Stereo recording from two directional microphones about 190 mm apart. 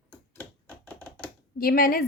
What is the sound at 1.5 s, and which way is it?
Speech, 50° left (ahead or behind).